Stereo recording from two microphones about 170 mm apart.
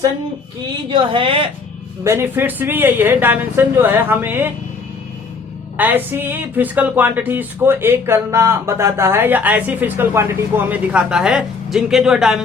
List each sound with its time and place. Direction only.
0.9 s a woman's voice: 30° right (ahead or behind)
2.0 s speech: 15° right (ahead or behind)
5.7 s speech: 10° right (ahead or behind)